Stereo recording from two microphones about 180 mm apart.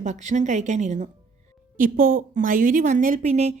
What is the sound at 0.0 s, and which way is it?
A woman's voice, 40° right (ahead or behind).